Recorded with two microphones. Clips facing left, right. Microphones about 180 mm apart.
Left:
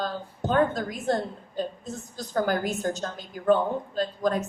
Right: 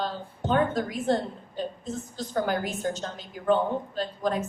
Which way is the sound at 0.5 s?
45° left (ahead or behind).